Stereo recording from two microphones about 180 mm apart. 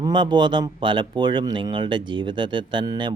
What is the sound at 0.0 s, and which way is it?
Speech, 25° right (ahead or behind).